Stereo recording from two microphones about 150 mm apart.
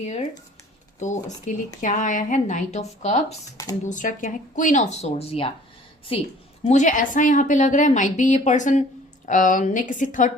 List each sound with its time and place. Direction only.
0.0 s speech: 50° left (ahead or behind)
3.8 s a woman's voice: 60° left (ahead or behind); by 6.2 s 35° left (ahead or behind)
6.7 s speech: 55° left (ahead or behind)